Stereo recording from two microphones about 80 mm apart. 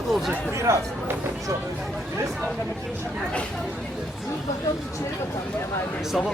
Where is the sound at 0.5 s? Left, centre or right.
Right.